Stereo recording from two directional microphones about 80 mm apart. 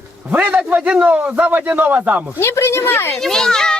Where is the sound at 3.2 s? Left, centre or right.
Centre.